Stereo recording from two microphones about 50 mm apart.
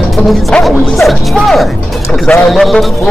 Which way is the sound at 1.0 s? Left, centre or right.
Centre.